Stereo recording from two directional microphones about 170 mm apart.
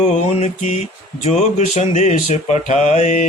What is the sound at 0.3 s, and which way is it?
Mantra, 40° left (ahead or behind).